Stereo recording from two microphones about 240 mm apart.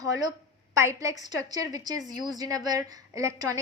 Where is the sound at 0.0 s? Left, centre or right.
Centre.